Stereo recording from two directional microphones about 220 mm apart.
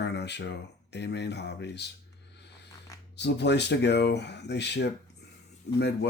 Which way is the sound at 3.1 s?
50° left (ahead or behind).